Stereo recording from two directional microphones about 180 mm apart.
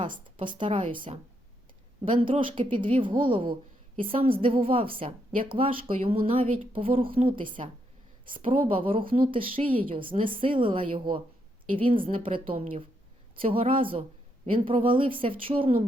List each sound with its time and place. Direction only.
0.0 s a woman's voice: 25° right (ahead or behind)